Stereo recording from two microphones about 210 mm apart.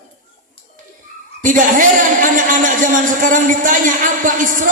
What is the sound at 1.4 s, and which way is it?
A man's voice, 40° right (ahead or behind).